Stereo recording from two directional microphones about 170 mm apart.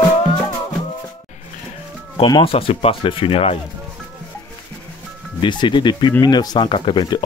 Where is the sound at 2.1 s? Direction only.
30° left (ahead or behind).